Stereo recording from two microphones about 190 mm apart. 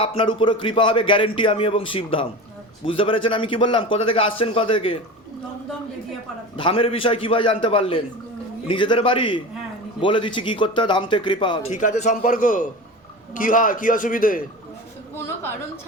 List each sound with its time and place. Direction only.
0.0 s a man's voice: 30° left (ahead or behind)
6.6 s a man's voice: 30° left (ahead or behind)
11.7 s a man's voice: 40° left (ahead or behind)